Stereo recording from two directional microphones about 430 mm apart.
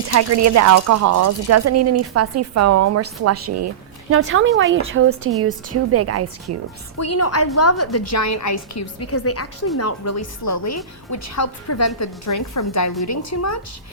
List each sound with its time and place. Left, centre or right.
0.1 s speech: right
7.0 s a woman's voice: left